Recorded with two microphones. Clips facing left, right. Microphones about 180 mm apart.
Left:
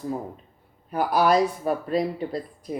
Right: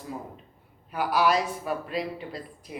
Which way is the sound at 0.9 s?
45° left (ahead or behind).